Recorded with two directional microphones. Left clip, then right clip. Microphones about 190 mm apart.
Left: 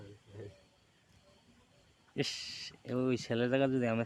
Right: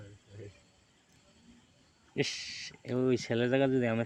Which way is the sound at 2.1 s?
5° right (ahead or behind).